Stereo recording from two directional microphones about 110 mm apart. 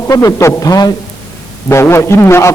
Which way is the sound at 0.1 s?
30° left (ahead or behind).